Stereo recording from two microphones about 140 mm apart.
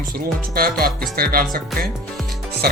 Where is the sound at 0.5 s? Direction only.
90° right.